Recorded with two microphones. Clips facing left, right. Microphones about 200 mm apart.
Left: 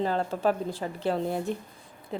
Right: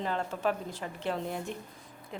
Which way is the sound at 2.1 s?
35° left (ahead or behind).